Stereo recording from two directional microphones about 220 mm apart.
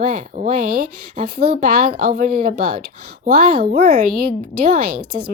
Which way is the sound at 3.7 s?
45° right (ahead or behind).